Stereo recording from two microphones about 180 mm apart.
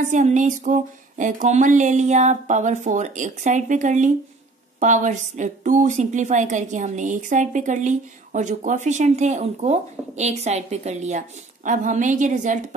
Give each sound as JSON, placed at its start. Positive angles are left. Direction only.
{"t": 0.1, "sound": "speech", "side_deg": -45}